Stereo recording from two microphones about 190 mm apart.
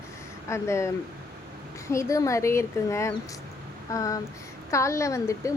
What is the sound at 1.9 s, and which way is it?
Speech, 15° left (ahead or behind).